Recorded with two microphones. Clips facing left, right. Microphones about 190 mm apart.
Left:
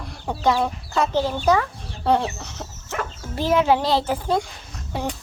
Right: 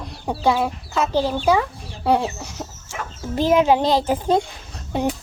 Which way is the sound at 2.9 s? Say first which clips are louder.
Left 4 dB; 65° left (ahead or behind).